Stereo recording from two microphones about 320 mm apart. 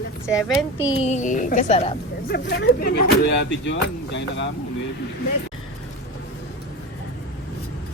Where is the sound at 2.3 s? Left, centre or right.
Left.